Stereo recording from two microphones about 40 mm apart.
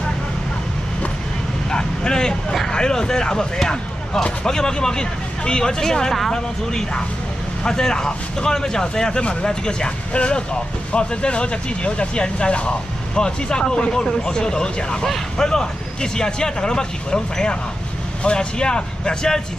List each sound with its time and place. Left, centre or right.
1.7 s vehicle: left
2.7 s speech: centre